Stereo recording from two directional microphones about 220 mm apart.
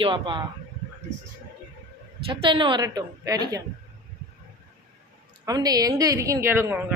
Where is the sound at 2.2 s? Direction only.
25° right (ahead or behind).